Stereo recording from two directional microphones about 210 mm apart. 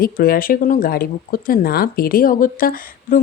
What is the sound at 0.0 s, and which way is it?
Speech, 45° left (ahead or behind).